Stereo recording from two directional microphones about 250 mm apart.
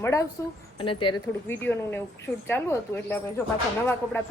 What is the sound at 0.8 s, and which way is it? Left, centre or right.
Speech, centre.